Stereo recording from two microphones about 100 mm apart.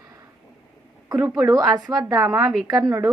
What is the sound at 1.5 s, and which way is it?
Speech, 40° right (ahead or behind).